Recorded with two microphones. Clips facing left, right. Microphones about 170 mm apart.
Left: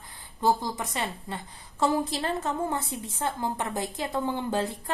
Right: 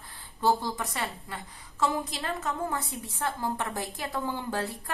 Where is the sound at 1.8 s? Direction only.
35° left (ahead or behind).